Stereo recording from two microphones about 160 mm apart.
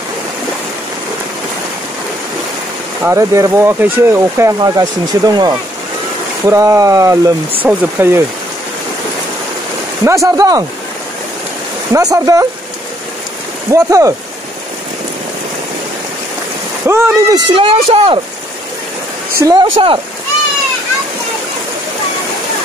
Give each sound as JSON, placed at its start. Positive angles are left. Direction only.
{"t": 3.0, "sound": "speech", "side_deg": -15}
{"t": 10.0, "sound": "speech", "side_deg": -20}
{"t": 11.9, "sound": "speech", "side_deg": -20}
{"t": 13.7, "sound": "speech", "side_deg": -20}
{"t": 16.8, "sound": "speech", "side_deg": -15}
{"t": 17.6, "sound": "speech", "side_deg": -35}
{"t": 19.3, "sound": "speech", "side_deg": -25}